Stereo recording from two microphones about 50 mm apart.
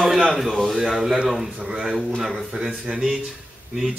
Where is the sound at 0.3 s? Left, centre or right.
Centre.